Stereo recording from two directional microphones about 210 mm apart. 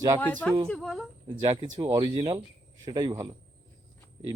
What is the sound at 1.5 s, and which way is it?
Speech, 35° right (ahead or behind).